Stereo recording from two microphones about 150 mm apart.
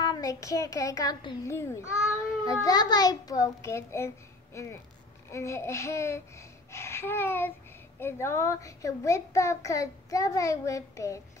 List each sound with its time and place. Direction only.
0.0 s a child's voice: 25° left (ahead or behind)
5.3 s a child's voice: 20° left (ahead or behind)